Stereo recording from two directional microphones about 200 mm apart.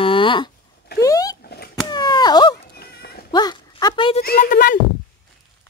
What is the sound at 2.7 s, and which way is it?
Dog, 50° left (ahead or behind).